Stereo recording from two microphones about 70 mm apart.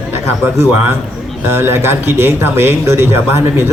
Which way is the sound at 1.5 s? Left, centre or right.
Right.